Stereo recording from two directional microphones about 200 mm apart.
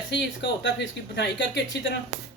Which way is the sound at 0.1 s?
60° left (ahead or behind).